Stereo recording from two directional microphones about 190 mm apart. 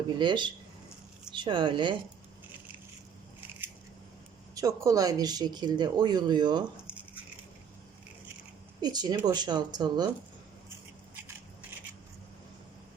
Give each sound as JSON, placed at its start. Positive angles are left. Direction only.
{"t": 0.2, "sound": "speech", "side_deg": -25}
{"t": 4.5, "sound": "speech", "side_deg": -15}
{"t": 8.8, "sound": "speech", "side_deg": -20}
{"t": 11.1, "sound": "crushing", "side_deg": -10}